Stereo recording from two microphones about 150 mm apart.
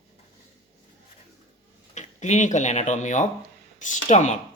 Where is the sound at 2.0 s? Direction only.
50° left (ahead or behind).